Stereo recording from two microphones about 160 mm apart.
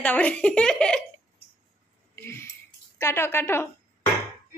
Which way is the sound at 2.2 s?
15° left (ahead or behind).